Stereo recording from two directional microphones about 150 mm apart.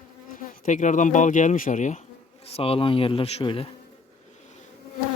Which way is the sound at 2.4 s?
40° left (ahead or behind).